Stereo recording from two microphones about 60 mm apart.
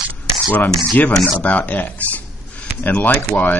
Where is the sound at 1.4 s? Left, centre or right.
Left.